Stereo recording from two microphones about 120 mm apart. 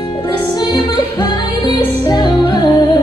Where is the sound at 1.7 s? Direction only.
40° left (ahead or behind).